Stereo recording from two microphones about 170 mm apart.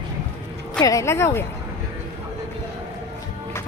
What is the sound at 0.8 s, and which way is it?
Speech, 20° left (ahead or behind).